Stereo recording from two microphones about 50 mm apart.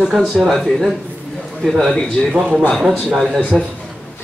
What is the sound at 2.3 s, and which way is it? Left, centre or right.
Speech, centre.